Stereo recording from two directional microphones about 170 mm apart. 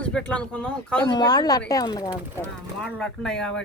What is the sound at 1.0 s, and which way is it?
Speech, 25° left (ahead or behind).